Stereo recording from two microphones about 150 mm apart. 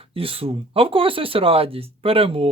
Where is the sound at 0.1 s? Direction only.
40° right (ahead or behind).